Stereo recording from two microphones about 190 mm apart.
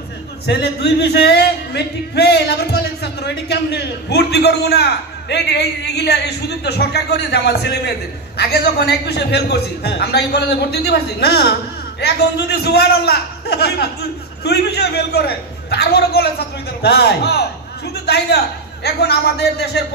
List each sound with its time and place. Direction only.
0.5 s speech: 60° left (ahead or behind)